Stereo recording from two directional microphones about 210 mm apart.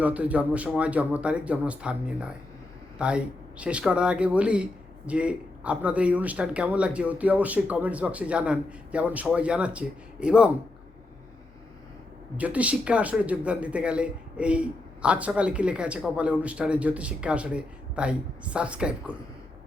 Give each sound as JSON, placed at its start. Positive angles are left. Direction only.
{"t": 0.0, "sound": "speech", "side_deg": -5}
{"t": 12.4, "sound": "speech", "side_deg": -5}